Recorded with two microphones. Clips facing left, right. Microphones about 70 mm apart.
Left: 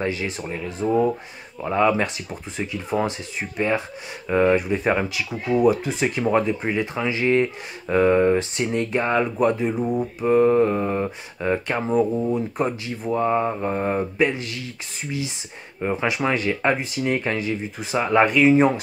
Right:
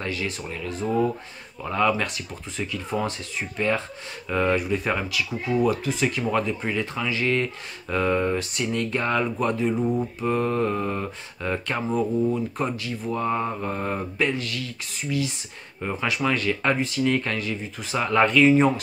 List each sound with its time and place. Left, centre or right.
0.0 s speech: left